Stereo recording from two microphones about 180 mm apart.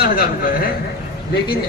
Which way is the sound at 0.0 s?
55° left (ahead or behind).